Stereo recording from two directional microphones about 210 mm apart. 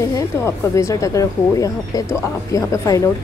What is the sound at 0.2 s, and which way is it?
Speech, 15° left (ahead or behind).